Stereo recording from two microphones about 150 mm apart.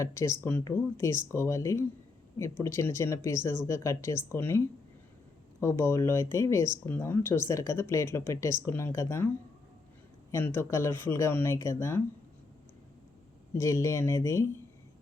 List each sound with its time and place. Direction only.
0.0 s speech: 20° left (ahead or behind)
10.3 s speech: 15° left (ahead or behind)
13.5 s speech: 20° left (ahead or behind)